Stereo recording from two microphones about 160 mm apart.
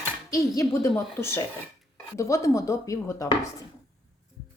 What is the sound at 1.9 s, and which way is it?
Chopping, 20° left (ahead or behind).